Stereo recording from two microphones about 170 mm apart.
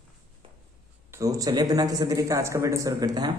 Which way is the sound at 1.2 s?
20° right (ahead or behind).